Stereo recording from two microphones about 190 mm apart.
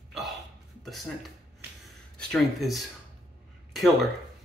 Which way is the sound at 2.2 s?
Centre (ahead or behind).